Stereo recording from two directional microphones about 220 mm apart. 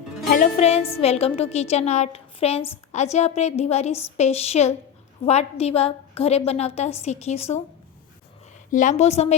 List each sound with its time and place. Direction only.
0.3 s music: 30° left (ahead or behind)
0.9 s a woman's voice: 25° left (ahead or behind)
8.7 s a woman's voice: 35° left (ahead or behind)